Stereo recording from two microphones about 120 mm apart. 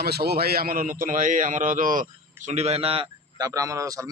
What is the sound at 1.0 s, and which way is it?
Speech, 90° right.